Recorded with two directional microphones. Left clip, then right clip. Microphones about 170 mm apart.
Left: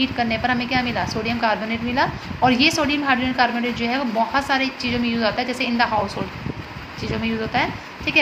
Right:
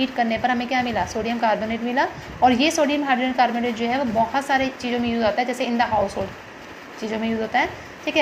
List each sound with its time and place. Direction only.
0.0 s a woman's voice: 15° right (ahead or behind)
7.1 s a woman's voice: 10° right (ahead or behind)